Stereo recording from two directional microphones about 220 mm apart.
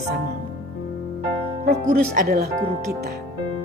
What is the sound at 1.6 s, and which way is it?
Speech, 45° right (ahead or behind).